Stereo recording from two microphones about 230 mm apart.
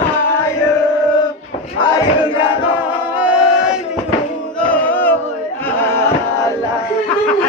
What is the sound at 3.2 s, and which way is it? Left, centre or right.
Battle cry, centre.